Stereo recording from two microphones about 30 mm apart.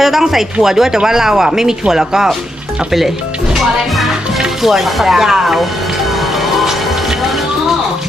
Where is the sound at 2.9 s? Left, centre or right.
Centre.